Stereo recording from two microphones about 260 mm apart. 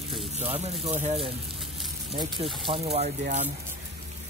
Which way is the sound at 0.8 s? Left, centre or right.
Right.